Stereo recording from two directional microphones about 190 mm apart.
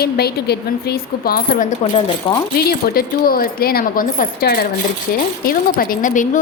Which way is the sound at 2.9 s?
50° left (ahead or behind).